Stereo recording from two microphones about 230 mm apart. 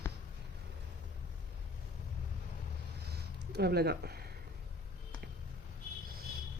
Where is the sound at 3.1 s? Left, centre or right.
Right.